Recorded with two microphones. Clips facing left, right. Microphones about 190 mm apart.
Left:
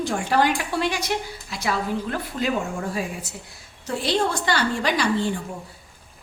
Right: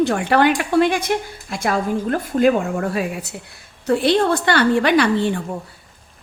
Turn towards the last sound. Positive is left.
turn(degrees=-65)  # may be behind; listen again after turning